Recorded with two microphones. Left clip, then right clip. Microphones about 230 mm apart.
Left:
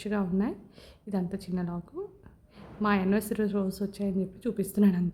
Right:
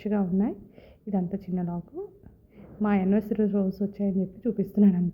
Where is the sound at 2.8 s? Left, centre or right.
Centre.